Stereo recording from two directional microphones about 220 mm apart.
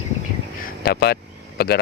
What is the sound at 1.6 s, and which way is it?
Speech, 50° left (ahead or behind).